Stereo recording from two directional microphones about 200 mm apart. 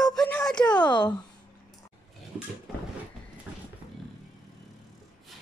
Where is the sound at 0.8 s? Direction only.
20° left (ahead or behind).